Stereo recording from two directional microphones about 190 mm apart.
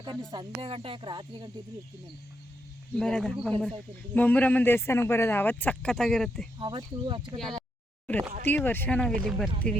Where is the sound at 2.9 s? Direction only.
5° left (ahead or behind).